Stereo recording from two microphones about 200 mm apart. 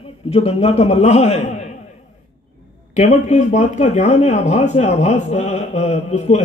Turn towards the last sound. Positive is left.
turn(degrees=35)  # may be behind; listen again after turning